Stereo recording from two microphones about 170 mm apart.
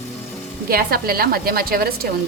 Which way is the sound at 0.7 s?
65° right (ahead or behind).